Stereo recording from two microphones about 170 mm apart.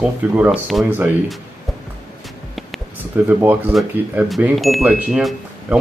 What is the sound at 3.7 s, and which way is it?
Speech, centre (ahead or behind).